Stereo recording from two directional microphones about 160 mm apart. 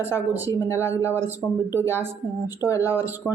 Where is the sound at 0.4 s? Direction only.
15° left (ahead or behind).